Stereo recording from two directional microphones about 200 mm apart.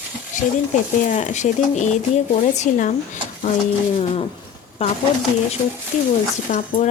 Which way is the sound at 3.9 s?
30° left (ahead or behind).